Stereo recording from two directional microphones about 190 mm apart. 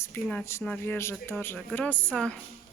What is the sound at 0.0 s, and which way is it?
Speech, 10° left (ahead or behind).